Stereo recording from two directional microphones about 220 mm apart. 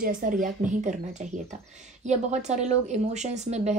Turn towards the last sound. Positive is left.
turn(degrees=-30)  # may be behind; listen again after turning